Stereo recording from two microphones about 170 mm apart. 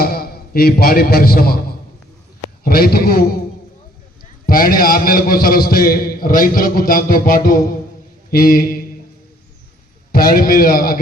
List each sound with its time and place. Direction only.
0.0 s a man's voice: 65° left (ahead or behind)
2.6 s a man's voice: 60° left (ahead or behind)
4.4 s a man's voice: 60° left (ahead or behind)
10.1 s a man's voice: 60° left (ahead or behind)